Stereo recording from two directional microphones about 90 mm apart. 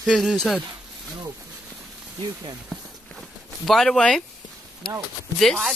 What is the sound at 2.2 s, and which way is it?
Speech, 50° right (ahead or behind).